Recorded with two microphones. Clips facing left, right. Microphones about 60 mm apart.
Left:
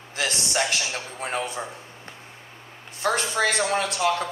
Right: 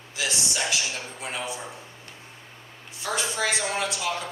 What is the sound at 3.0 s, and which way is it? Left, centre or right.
Speech, left.